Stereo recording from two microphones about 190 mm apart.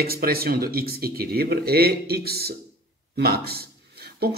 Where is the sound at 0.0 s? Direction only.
55° right (ahead or behind).